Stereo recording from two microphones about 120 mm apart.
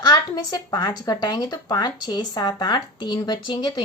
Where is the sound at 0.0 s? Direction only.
35° left (ahead or behind).